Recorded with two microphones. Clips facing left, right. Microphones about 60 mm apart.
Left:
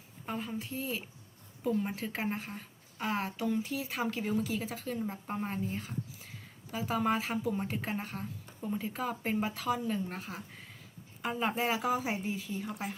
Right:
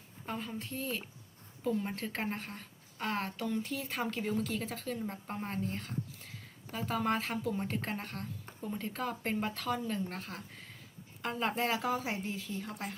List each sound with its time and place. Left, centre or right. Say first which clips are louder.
0.3 s a woman's voice: left 2 dB; centre